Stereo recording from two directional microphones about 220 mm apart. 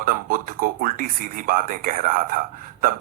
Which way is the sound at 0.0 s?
40° right (ahead or behind).